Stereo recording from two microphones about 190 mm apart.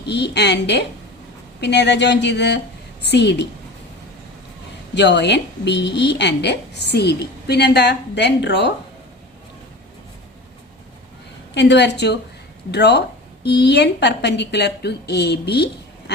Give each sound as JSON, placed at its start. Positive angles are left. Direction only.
{"t": 0.0, "sound": "a woman's voice", "side_deg": 65}
{"t": 4.9, "sound": "a woman's voice", "side_deg": 65}
{"t": 11.5, "sound": "a woman's voice", "side_deg": 65}